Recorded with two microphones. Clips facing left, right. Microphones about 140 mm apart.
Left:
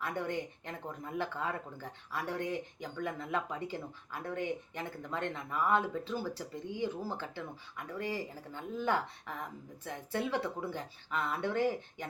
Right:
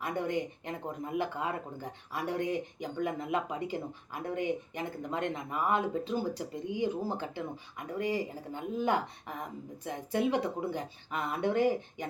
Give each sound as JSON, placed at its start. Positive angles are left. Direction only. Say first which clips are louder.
{"t": 0.0, "sound": "speech", "louder": "right 3 dB", "side_deg": -15}